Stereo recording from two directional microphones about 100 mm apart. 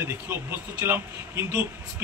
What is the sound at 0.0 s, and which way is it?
Speech, 20° right (ahead or behind).